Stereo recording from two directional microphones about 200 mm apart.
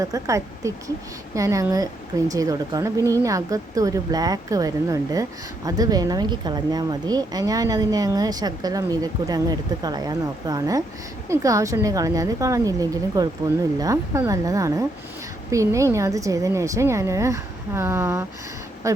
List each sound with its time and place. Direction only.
0.0 s a woman's voice: 15° right (ahead or behind)